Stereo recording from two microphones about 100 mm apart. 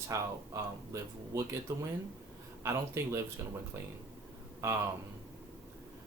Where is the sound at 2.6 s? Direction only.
30° right (ahead or behind).